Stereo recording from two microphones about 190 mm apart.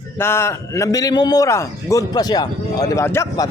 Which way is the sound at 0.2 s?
15° left (ahead or behind).